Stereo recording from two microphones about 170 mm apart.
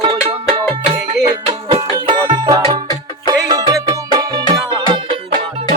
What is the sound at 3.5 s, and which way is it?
Music, 20° right (ahead or behind).